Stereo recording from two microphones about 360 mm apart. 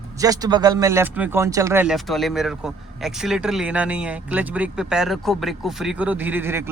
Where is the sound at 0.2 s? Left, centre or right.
Centre.